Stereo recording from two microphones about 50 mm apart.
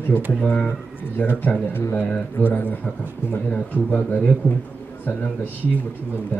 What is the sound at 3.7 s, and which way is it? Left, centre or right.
Speech, left.